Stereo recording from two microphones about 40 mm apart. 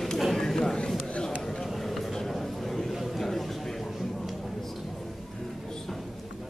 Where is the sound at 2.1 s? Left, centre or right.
Centre.